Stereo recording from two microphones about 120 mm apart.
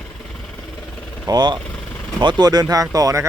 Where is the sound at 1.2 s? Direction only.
35° right (ahead or behind).